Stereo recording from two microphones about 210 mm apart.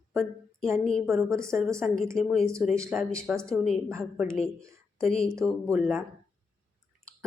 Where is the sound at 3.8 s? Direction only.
10° right (ahead or behind).